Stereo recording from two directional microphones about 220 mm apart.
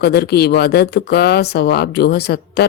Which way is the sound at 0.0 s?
45° left (ahead or behind).